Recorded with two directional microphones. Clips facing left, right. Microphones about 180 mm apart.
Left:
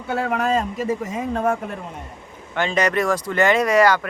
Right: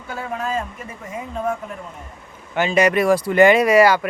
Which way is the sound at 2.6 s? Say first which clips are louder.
Right 3 dB; 10° right (ahead or behind).